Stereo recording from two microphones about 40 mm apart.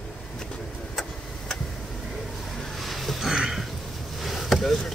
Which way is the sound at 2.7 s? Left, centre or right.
Centre.